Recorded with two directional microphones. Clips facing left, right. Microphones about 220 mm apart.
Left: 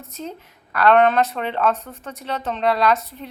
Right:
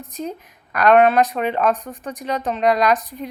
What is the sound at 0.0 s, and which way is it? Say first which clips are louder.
A woman's voice: right 4 dB; 15° right (ahead or behind).